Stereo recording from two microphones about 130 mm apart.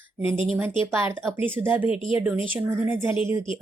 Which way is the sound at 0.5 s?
15° right (ahead or behind).